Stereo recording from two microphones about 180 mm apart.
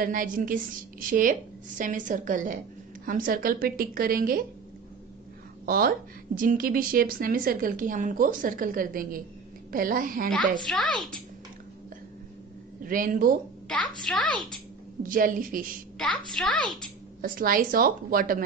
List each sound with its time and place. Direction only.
0.0 s a woman's voice: 50° right (ahead or behind)
5.7 s a woman's voice: 55° right (ahead or behind)
10.6 s a child's voice: centre (ahead or behind)
12.8 s a woman's voice: 50° right (ahead or behind)
13.7 s a child's voice: 5° left (ahead or behind)
15.0 s a woman's voice: 50° right (ahead or behind)
16.0 s a child's voice: 5° left (ahead or behind)
17.2 s a woman's voice: 50° right (ahead or behind)